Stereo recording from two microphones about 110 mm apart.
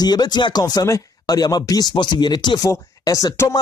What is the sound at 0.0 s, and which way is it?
Speech, 40° left (ahead or behind).